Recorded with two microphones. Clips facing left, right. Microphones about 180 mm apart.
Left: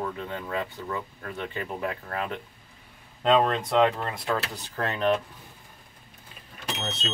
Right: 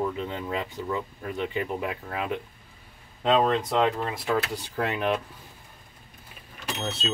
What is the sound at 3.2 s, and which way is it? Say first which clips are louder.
Speech: even; centre (ahead or behind).